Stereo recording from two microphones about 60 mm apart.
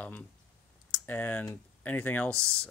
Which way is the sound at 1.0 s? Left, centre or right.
Left.